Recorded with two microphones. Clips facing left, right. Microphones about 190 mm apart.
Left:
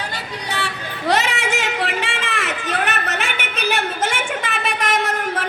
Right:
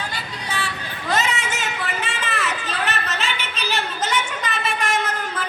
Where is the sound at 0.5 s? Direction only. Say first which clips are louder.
Left 1 dB; 65° left (ahead or behind); by 2.5 s 85° left.